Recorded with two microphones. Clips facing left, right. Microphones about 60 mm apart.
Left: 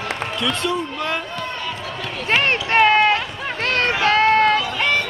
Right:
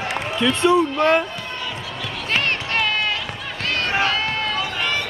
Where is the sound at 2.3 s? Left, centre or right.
Left.